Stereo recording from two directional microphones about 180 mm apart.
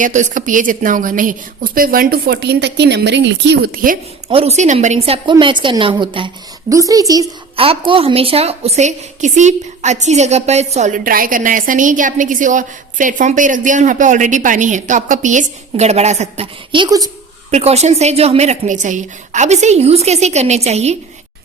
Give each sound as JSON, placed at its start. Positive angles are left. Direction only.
{"t": 0.0, "sound": "a woman's voice", "side_deg": -45}
{"t": 4.3, "sound": "a woman's voice", "side_deg": -35}
{"t": 7.5, "sound": "a woman's voice", "side_deg": -30}
{"t": 17.5, "sound": "a woman's voice", "side_deg": -35}